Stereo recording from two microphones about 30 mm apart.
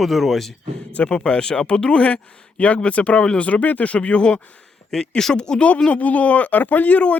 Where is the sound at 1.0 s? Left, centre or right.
Left.